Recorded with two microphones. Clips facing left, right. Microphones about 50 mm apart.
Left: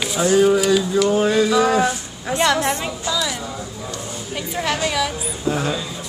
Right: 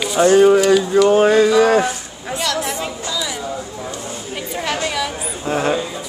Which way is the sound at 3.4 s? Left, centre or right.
Right.